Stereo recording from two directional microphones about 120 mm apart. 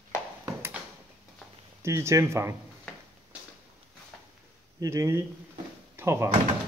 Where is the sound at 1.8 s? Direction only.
25° right (ahead or behind).